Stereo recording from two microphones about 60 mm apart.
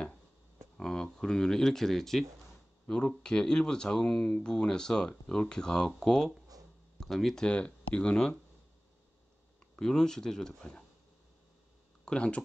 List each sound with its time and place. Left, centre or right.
0.7 s speech: centre
2.9 s speech: centre
7.4 s speech: centre
9.8 s speech: centre
12.0 s speech: centre